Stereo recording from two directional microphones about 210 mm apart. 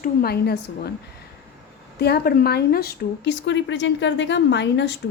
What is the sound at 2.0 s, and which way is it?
Speech, 50° left (ahead or behind).